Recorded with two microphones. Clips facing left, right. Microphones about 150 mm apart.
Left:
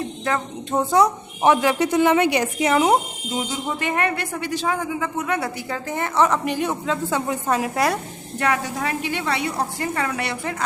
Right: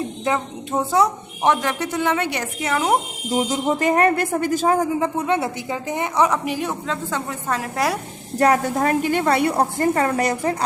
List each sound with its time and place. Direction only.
0.3 s a woman's voice: 10° right (ahead or behind); by 2.9 s 15° left (ahead or behind)
3.3 s a woman's voice: 40° right (ahead or behind); by 7.2 s 5° left (ahead or behind)
7.3 s a woman's voice: 15° left (ahead or behind)
8.4 s a woman's voice: 40° right (ahead or behind)